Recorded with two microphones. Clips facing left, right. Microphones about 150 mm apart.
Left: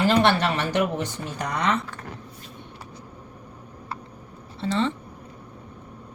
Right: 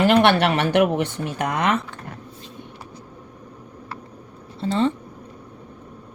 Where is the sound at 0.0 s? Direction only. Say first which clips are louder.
Right 4 dB; 65° right (ahead or behind).